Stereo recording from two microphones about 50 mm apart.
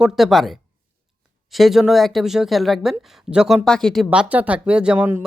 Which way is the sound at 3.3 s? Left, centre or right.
Centre.